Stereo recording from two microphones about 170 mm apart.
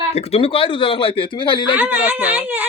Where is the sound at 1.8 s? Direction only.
10° right (ahead or behind).